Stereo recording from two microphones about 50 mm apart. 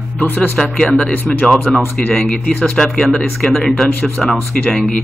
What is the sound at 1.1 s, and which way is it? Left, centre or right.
Speech, left.